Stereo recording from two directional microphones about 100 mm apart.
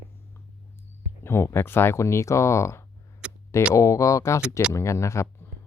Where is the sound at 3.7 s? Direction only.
35° left (ahead or behind).